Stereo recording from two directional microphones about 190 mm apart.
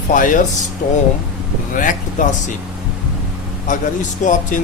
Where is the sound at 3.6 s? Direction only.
40° left (ahead or behind).